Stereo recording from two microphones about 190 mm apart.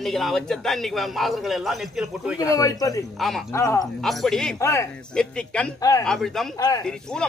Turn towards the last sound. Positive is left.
turn(degrees=5)  # may be behind; listen again after turning